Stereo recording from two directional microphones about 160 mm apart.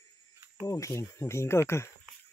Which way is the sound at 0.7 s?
20° left (ahead or behind).